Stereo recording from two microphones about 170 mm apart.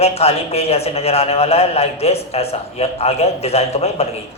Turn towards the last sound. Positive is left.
turn(degrees=35)  # may be behind; listen again after turning